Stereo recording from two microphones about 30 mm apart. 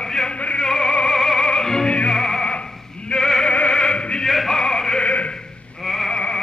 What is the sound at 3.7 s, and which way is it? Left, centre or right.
Opera, left.